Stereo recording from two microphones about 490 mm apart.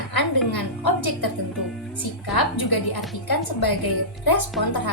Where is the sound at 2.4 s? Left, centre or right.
Left.